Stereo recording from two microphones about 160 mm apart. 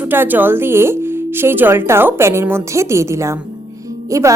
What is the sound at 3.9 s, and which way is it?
Music, 20° right (ahead or behind).